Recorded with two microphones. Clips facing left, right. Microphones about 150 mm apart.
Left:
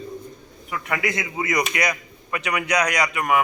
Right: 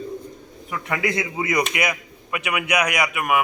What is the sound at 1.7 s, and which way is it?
A man's voice, 15° right (ahead or behind).